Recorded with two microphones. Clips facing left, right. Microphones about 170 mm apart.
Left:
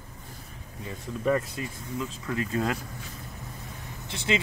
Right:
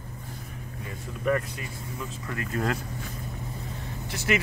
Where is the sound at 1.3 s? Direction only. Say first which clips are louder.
Left 1 dB; 25° left (ahead or behind).